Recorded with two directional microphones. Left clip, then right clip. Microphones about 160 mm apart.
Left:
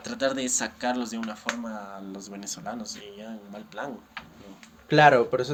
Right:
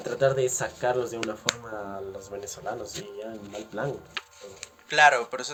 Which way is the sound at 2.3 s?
45° left (ahead or behind).